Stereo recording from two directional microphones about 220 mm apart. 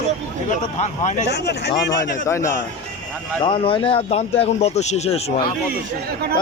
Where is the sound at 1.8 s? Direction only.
15° left (ahead or behind).